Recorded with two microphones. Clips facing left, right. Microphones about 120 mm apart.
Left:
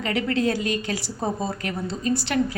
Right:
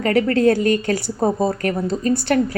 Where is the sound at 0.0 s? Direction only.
45° right (ahead or behind).